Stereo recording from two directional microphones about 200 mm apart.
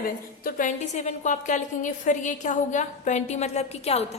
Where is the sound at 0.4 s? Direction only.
40° left (ahead or behind).